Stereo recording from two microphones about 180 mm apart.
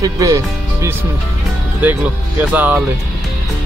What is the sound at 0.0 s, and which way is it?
Speech, 20° right (ahead or behind).